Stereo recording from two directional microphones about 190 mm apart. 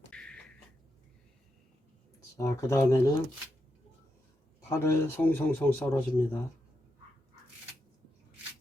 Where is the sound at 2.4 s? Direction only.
15° left (ahead or behind).